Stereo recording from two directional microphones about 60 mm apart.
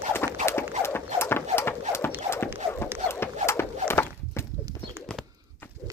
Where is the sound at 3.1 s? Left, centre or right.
Left.